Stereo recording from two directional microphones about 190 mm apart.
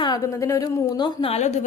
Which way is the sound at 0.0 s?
20° left (ahead or behind).